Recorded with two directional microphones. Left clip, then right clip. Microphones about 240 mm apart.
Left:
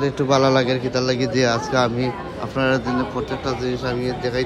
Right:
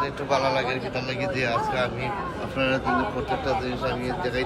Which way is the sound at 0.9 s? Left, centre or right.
Centre.